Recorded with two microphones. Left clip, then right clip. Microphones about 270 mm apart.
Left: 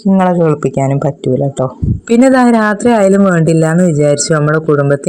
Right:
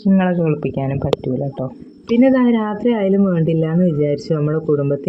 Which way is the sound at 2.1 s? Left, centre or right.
Centre.